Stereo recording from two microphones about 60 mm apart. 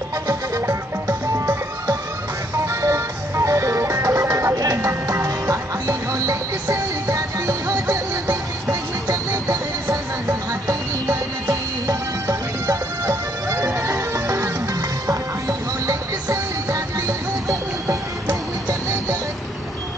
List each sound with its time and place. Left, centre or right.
0.3 s music: right
2.6 s music: right
4.6 s music: right
11.9 s music: right